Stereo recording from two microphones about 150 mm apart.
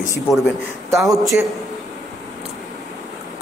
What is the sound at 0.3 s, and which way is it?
Speech, centre (ahead or behind).